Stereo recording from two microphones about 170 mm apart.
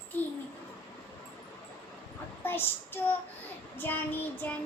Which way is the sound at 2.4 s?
10° left (ahead or behind).